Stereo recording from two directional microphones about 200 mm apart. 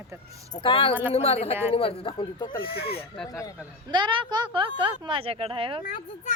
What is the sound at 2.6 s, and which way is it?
Speech, 50° left (ahead or behind).